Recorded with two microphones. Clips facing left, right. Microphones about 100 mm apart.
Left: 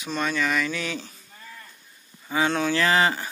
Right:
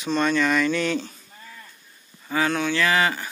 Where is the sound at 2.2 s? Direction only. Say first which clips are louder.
Even; 20° left (ahead or behind).